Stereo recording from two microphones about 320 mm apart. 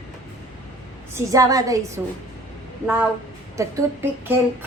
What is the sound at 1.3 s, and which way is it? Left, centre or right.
A woman's voice, centre.